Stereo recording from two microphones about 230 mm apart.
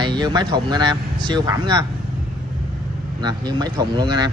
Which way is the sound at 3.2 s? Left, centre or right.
Centre.